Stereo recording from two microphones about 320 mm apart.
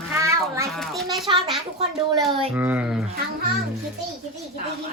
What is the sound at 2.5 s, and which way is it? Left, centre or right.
Speech, centre.